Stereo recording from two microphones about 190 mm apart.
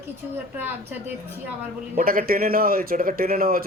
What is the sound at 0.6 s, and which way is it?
Speech, 10° right (ahead or behind).